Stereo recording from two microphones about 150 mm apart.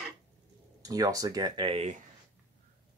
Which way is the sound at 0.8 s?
25° right (ahead or behind).